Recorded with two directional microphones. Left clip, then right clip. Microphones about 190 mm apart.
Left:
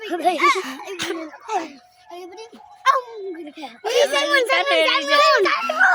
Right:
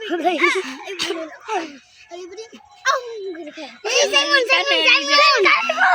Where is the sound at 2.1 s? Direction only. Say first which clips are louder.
Right 2 dB; 45° left (ahead or behind).